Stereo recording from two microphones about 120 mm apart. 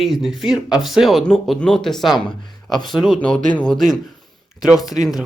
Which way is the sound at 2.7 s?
35° left (ahead or behind).